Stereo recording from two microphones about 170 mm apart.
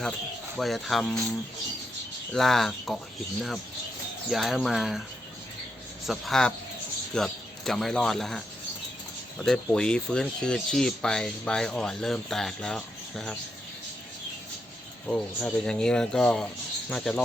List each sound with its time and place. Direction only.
0.5 s speech: centre (ahead or behind)
2.3 s speech: centre (ahead or behind)
4.3 s speech: centre (ahead or behind)
6.1 s speech: centre (ahead or behind)
15.0 s speech: 5° left (ahead or behind)